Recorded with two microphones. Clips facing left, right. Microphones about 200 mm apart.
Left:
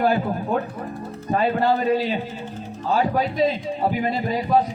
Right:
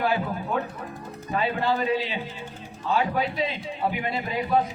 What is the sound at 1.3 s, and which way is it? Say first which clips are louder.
A man's voice: left 5 dB; 45° left (ahead or behind).